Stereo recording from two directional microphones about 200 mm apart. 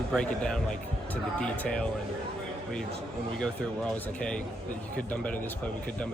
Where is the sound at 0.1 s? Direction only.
5° left (ahead or behind).